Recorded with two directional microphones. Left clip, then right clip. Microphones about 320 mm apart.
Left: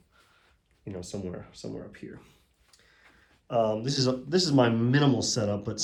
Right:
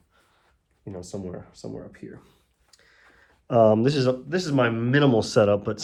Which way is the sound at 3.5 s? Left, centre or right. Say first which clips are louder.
Right 8 dB; right.